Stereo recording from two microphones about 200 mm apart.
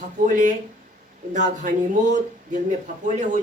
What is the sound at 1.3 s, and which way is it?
Speech, 40° right (ahead or behind).